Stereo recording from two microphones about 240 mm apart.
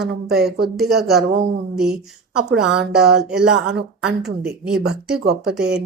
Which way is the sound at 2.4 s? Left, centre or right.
Centre.